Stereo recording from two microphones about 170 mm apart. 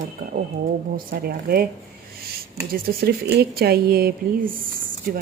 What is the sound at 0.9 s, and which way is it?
Speech, 65° right (ahead or behind).